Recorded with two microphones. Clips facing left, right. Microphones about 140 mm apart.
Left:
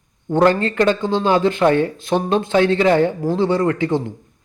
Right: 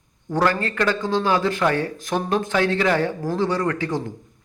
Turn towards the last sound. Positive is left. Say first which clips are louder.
# left 5 dB
turn(degrees=25)  # may be behind; listen again after turning